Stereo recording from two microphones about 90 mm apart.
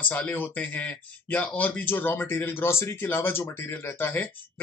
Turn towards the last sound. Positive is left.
turn(degrees=25)  # may be behind; listen again after turning